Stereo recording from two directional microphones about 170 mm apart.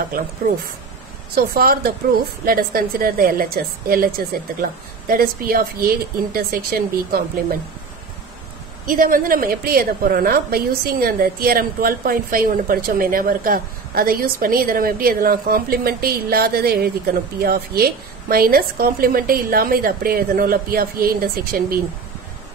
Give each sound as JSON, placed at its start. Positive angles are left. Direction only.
{"t": 1.3, "sound": "a woman's voice", "side_deg": -60}
{"t": 8.8, "sound": "a woman's voice", "side_deg": -55}